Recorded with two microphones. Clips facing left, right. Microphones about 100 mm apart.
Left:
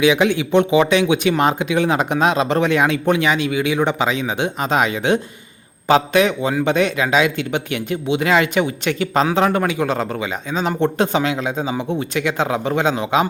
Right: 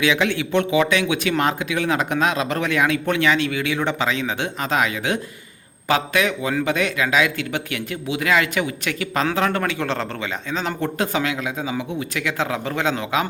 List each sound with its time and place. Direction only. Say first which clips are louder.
0.0 s speech: left 5 dB; 20° left (ahead or behind)